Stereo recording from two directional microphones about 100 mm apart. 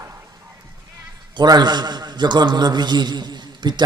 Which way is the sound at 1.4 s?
45° right (ahead or behind).